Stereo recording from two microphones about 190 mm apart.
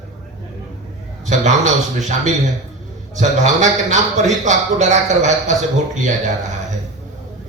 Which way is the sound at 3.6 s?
40° right (ahead or behind).